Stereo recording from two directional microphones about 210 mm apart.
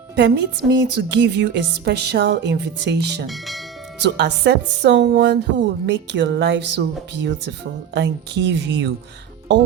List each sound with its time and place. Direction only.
0.2 s speech: 55° right (ahead or behind)
3.2 s speech: centre (ahead or behind)
4.0 s speech: 55° right (ahead or behind)